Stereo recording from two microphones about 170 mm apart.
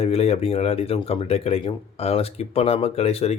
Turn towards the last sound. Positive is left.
turn(degrees=35)  # may be behind; listen again after turning